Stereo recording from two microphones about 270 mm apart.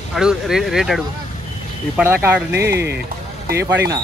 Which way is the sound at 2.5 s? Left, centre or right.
Right.